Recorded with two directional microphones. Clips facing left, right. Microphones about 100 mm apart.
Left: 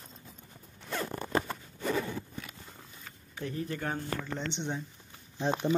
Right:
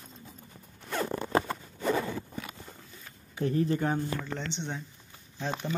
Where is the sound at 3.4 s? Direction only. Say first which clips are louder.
Right 8 dB; 35° right (ahead or behind).